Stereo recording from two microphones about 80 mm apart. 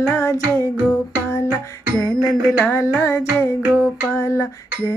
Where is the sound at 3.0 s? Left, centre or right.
Left.